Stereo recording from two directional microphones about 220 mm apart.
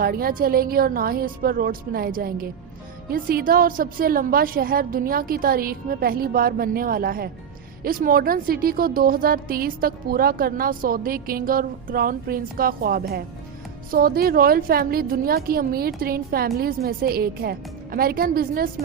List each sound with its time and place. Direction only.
0.0 s a woman's voice: 40° right (ahead or behind)